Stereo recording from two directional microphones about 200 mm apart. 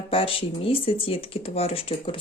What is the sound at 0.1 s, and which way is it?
Speech, 25° left (ahead or behind).